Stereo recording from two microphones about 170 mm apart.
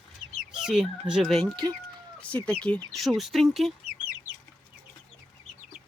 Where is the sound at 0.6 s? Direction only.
5° right (ahead or behind).